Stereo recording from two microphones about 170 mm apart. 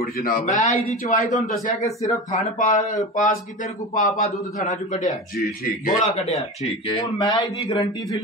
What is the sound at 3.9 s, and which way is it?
Speech, 50° left (ahead or behind).